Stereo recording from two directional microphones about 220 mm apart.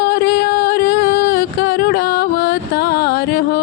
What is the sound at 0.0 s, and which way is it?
Music, 45° left (ahead or behind).